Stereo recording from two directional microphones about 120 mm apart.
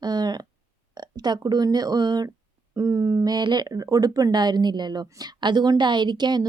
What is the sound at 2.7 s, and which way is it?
Speech, 25° right (ahead or behind).